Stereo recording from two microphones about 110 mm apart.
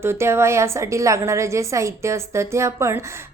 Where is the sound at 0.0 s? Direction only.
25° right (ahead or behind).